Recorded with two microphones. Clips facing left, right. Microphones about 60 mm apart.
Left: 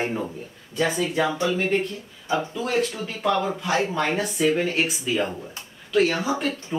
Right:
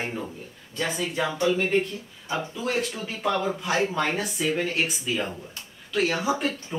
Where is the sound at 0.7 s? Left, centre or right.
Centre.